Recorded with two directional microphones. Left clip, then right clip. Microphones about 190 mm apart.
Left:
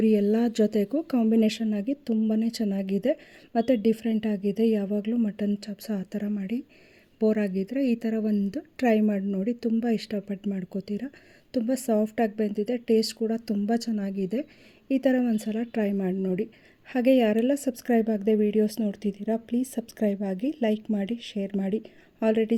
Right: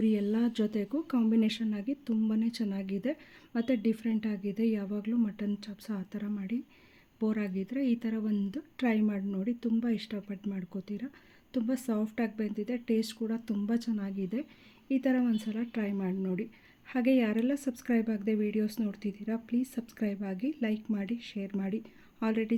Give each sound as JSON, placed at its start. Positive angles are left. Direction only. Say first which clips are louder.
{"t": 0.0, "sound": "a woman's voice", "louder": "left 8 dB", "side_deg": 35}